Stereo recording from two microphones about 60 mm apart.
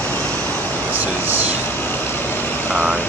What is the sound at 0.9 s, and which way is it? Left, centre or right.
Speech, right.